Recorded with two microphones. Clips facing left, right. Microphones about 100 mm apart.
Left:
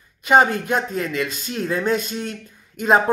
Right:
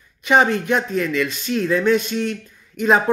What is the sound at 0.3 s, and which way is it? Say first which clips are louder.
Speech: even; 45° left (ahead or behind).